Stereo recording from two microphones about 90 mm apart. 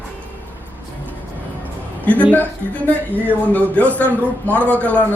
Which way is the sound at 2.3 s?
20° left (ahead or behind).